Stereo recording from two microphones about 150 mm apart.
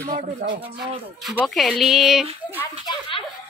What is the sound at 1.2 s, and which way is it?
Speech, centre (ahead or behind).